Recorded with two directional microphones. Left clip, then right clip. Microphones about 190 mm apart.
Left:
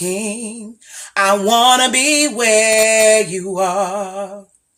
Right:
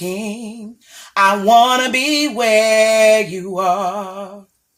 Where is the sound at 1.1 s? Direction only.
20° left (ahead or behind).